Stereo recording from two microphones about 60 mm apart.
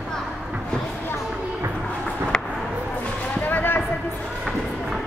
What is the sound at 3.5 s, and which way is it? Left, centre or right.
Basketball bounce, left.